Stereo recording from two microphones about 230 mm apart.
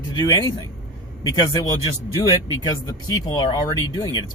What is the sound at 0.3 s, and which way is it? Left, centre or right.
Speech, centre.